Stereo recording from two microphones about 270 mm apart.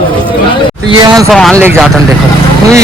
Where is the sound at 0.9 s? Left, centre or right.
Centre.